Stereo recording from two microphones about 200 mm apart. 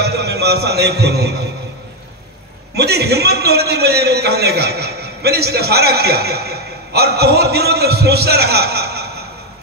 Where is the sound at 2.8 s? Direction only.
55° right (ahead or behind).